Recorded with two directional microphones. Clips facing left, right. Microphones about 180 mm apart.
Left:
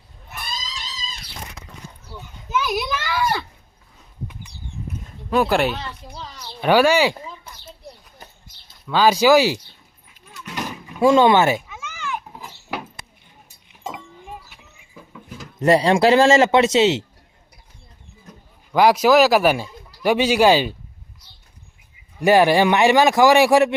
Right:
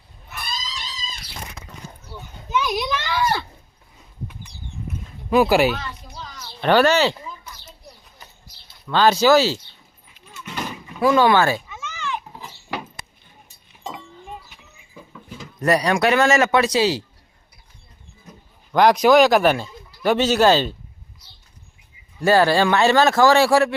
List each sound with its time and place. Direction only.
2.5 s a sound: 5° left (ahead or behind)
5.3 s speech: 5° right (ahead or behind)
6.1 s a sound: 30° left (ahead or behind)
6.6 s speech: 10° left (ahead or behind)
8.2 s a sound: 50° left (ahead or behind)
8.9 s speech: 10° left (ahead or behind)
10.3 s vehicle: centre (ahead or behind)
11.0 s cat: 25° left (ahead or behind); by 12.9 s 5° left (ahead or behind)
13.7 s vehicle: 5° left (ahead or behind)
15.5 s speech: 25° left (ahead or behind)
18.7 s speech: 5° left (ahead or behind)
22.2 s speech: 15° left (ahead or behind)